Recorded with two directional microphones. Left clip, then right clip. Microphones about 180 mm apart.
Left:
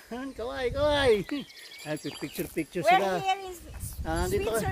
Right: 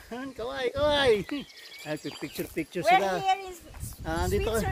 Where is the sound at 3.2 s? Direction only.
45° left (ahead or behind).